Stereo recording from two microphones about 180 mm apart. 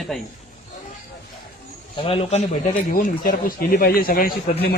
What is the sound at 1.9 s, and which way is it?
Speech, 30° left (ahead or behind).